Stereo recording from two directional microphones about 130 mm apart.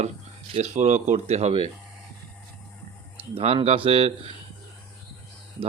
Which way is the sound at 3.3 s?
50° right (ahead or behind).